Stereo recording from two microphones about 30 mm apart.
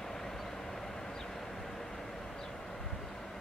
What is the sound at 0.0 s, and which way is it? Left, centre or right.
Vehicle, centre.